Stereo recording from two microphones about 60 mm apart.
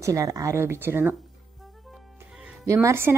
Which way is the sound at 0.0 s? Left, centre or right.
Right.